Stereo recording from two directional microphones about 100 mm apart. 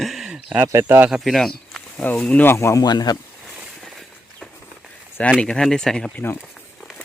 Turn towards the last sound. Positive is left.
turn(degrees=5)  # may be behind; listen again after turning